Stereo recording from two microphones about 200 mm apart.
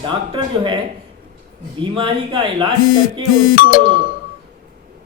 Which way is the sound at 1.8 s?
25° right (ahead or behind).